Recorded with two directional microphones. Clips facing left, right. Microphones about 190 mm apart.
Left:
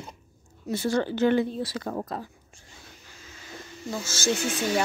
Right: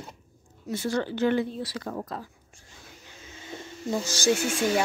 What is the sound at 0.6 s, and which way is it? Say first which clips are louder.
Speech: left 2 dB; 30° left (ahead or behind).